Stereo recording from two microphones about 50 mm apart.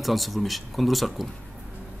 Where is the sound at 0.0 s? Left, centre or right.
Centre.